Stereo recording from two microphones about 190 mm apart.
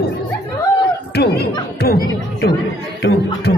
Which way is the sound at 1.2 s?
60° left (ahead or behind).